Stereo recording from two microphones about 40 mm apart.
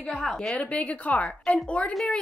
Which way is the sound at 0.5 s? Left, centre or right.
Left.